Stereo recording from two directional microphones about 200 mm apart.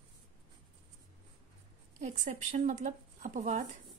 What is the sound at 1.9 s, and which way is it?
Speech, 35° right (ahead or behind).